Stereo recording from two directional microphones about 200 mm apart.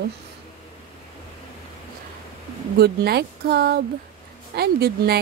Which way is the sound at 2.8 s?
50° right (ahead or behind).